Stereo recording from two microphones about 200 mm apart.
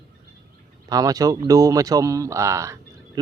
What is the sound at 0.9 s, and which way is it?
A man's voice, 20° right (ahead or behind).